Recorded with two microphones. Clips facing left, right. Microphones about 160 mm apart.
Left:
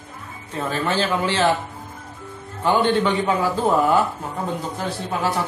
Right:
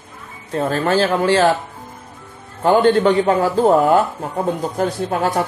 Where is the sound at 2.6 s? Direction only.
40° right (ahead or behind).